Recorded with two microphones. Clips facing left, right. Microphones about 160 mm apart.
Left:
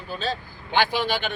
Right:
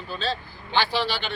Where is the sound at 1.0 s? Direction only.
50° left (ahead or behind).